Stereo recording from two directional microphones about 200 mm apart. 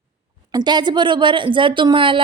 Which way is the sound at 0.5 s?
20° right (ahead or behind).